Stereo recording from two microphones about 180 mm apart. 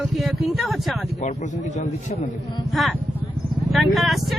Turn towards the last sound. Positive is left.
turn(degrees=0)  # may be behind; listen again after turning